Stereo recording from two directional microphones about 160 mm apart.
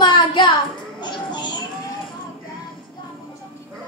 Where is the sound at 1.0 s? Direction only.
25° left (ahead or behind).